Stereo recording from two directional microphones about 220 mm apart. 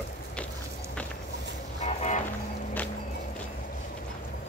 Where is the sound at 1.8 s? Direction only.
30° left (ahead or behind).